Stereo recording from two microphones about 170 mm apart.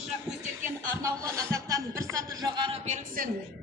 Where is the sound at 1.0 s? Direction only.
20° right (ahead or behind).